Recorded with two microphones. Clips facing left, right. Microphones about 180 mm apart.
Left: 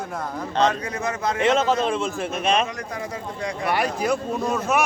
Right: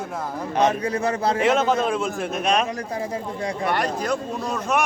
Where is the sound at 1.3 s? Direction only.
Centre (ahead or behind).